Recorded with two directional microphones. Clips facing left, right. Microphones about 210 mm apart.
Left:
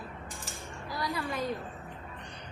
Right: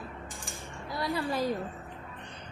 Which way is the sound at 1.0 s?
30° right (ahead or behind).